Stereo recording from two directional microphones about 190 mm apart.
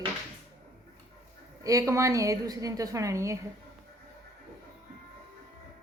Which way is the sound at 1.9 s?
15° right (ahead or behind).